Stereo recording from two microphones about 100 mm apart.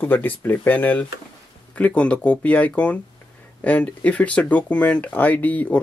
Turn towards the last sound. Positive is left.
turn(degrees=15)  # may be behind; listen again after turning